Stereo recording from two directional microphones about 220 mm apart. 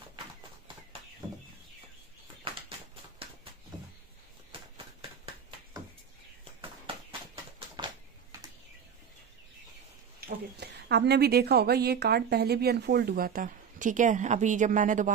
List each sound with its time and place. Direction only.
7.1 s clip-clop: 25° right (ahead or behind)
10.2 s a woman's voice: 50° right (ahead or behind)